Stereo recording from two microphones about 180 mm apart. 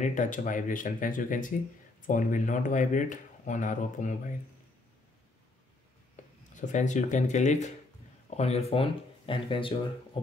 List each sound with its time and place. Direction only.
0.0 s speech: 45° left (ahead or behind)
6.5 s speech: 45° left (ahead or behind)